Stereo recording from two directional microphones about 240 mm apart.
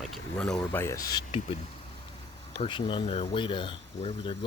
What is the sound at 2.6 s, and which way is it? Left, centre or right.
Speech, left.